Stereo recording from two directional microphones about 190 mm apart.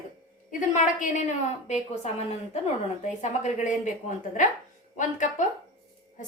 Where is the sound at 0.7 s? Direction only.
40° left (ahead or behind).